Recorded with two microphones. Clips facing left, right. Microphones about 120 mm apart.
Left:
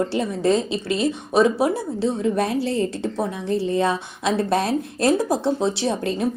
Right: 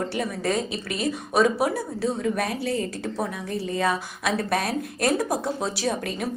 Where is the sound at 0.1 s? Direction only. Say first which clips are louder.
Left 6 dB; 25° left (ahead or behind).